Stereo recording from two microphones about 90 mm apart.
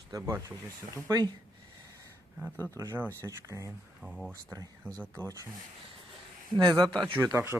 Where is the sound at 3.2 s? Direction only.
35° right (ahead or behind).